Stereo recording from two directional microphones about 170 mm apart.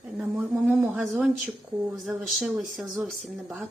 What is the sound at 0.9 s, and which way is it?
Speech, 5° right (ahead or behind).